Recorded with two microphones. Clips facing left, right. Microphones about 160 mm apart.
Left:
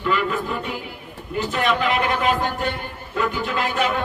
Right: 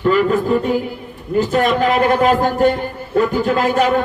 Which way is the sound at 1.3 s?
40° right (ahead or behind).